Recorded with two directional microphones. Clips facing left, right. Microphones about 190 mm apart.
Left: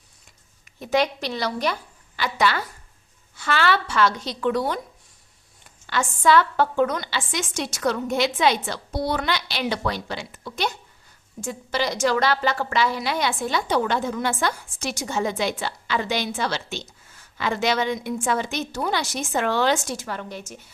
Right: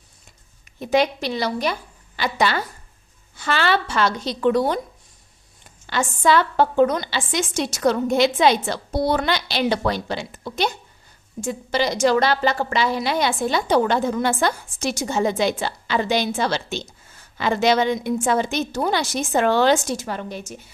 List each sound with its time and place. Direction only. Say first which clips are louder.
0.8 s a woman's voice: right 3 dB; 15° right (ahead or behind)
2.1 s a woman's voice: right 2 dB; 25° right (ahead or behind)
5.8 s a woman's voice: right 1 dB; 20° right (ahead or behind)
19.9 s a woman's voice: right 4 dB; 20° right (ahead or behind)